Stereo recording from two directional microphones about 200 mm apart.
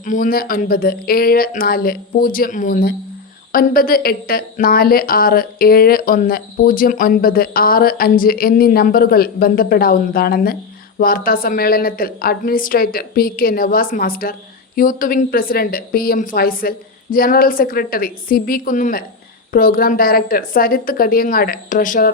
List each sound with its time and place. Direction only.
0.0 s a woman's voice: 40° left (ahead or behind)